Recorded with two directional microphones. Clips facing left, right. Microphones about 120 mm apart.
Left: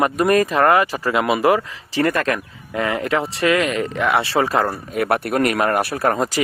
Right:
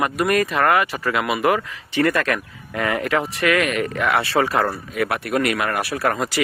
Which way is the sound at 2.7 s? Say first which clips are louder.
Left 1 dB; 20° left (ahead or behind).